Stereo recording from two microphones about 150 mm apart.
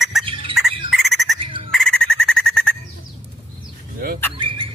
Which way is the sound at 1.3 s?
35° right (ahead or behind).